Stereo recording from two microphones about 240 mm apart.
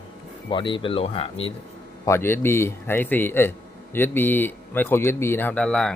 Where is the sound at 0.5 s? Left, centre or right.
Centre.